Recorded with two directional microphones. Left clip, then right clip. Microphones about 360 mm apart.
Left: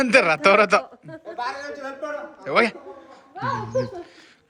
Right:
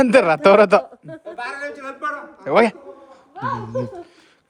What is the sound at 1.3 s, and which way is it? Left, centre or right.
Speech, right.